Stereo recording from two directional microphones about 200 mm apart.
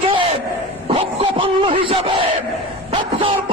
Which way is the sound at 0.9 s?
30° right (ahead or behind).